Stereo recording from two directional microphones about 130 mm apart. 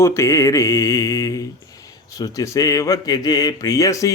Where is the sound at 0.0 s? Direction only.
20° left (ahead or behind).